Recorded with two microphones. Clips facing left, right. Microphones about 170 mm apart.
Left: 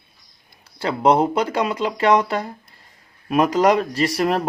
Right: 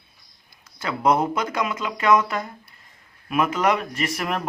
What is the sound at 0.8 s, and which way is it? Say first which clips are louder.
Speech: left 4 dB; 30° left (ahead or behind).